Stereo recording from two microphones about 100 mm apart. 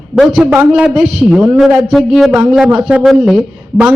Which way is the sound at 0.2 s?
5° right (ahead or behind).